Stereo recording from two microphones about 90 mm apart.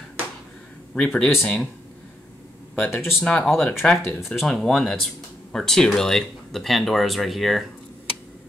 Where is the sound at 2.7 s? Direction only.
20° left (ahead or behind); by 7.6 s centre (ahead or behind).